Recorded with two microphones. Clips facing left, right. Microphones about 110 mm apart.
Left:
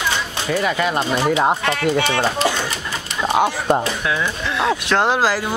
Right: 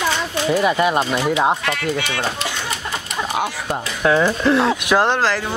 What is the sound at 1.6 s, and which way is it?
Speech, 35° left (ahead or behind).